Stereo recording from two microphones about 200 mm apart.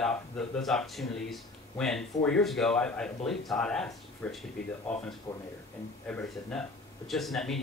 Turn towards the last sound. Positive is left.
turn(degrees=0)  # may be behind; listen again after turning